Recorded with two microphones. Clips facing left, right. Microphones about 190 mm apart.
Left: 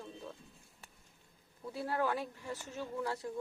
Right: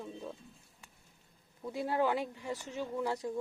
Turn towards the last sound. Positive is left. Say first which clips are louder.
# right 3 dB
turn(degrees=-15)  # may be behind; listen again after turning